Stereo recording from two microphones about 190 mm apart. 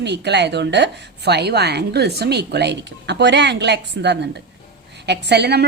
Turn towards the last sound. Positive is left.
turn(degrees=-60)  # may be behind; listen again after turning